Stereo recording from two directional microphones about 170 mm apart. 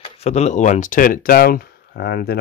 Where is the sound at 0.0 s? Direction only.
40° left (ahead or behind).